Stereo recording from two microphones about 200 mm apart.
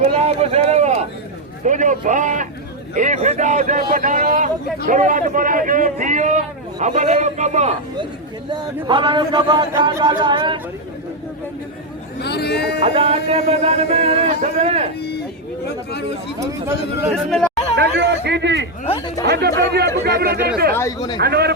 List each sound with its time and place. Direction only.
0.0 s a man's voice: 30° right (ahead or behind)
8.4 s a man's voice: 20° right (ahead or behind)
12.2 s speech: 55° left (ahead or behind)
12.8 s a man's voice: 30° right (ahead or behind)
16.4 s speech: 15° right (ahead or behind)
17.2 s speech: 5° left (ahead or behind)
17.7 s a man's voice: 60° right (ahead or behind)
18.9 s speech: 25° left (ahead or behind)
19.2 s a man's voice: 55° right (ahead or behind)
20.7 s speech: 15° left (ahead or behind)
21.2 s speech: 50° right (ahead or behind)